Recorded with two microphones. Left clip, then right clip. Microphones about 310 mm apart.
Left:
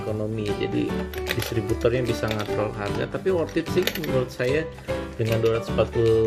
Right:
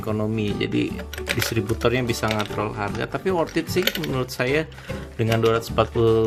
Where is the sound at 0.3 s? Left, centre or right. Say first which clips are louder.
Right 1 dB; centre.